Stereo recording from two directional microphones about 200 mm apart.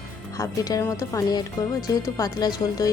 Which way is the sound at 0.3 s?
15° left (ahead or behind).